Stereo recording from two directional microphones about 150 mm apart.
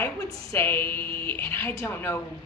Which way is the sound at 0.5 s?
15° left (ahead or behind).